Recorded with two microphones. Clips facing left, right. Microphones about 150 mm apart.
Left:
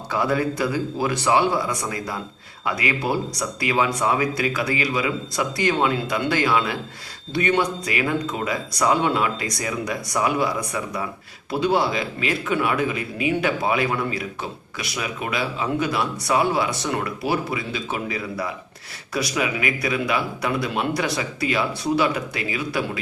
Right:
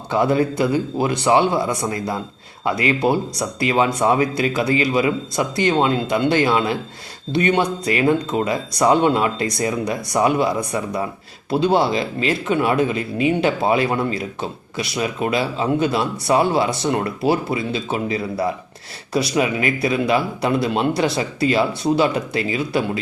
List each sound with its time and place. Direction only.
0.1 s speech: 25° right (ahead or behind)
11.5 s speech: 25° right (ahead or behind)